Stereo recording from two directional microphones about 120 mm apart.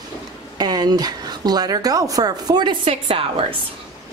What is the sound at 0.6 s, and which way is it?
A woman's voice, 35° right (ahead or behind).